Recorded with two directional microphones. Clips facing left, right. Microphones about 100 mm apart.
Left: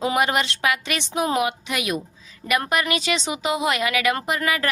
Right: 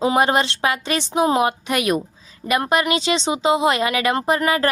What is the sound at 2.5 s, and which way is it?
A woman's voice, 30° right (ahead or behind).